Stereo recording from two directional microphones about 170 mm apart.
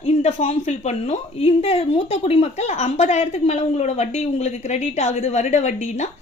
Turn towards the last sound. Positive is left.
turn(degrees=45)  # may be behind; listen again after turning